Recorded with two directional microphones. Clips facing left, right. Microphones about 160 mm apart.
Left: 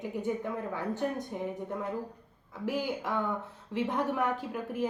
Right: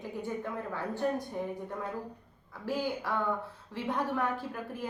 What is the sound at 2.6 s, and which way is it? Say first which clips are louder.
A woman's voice: left 1 dB; 20° left (ahead or behind).